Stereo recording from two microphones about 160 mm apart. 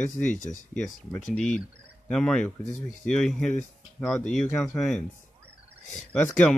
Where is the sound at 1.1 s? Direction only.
5° left (ahead or behind).